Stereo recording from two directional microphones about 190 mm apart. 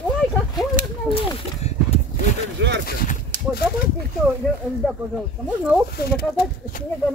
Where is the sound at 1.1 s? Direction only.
35° left (ahead or behind).